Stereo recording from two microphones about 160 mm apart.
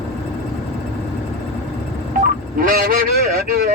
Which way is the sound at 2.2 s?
65° right (ahead or behind).